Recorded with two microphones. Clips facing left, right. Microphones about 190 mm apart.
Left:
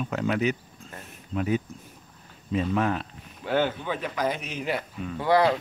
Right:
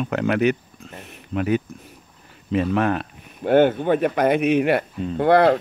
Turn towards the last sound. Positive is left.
turn(degrees=-60)  # may be behind; listen again after turning